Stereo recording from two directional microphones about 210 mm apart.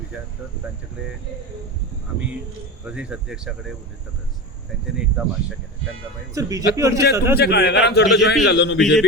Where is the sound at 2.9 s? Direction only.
5° right (ahead or behind).